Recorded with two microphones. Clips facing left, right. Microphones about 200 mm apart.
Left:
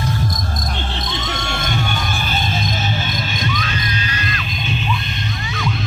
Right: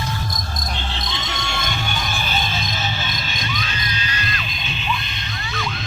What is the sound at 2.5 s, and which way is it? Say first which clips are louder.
Music: left 4 dB; 50° left (ahead or behind).